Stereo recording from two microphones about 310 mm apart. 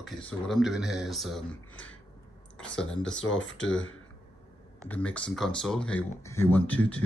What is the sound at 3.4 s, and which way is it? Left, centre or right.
Speech, left.